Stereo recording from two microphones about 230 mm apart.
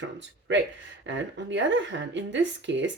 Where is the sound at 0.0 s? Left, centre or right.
Right.